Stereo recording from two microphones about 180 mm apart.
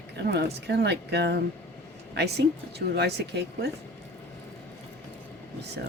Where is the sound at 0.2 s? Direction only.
75° right (ahead or behind).